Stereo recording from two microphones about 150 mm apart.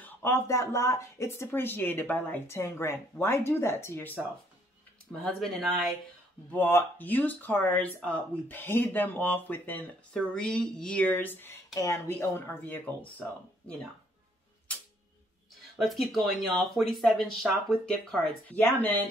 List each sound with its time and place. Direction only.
0.0 s speech: 15° left (ahead or behind)
6.5 s speech: 15° left (ahead or behind)
15.7 s speech: centre (ahead or behind)